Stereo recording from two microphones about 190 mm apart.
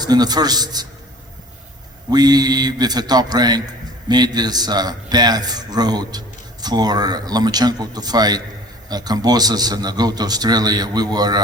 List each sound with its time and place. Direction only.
0.0 s a man's voice: 20° right (ahead or behind)
2.0 s a man's voice: 20° right (ahead or behind)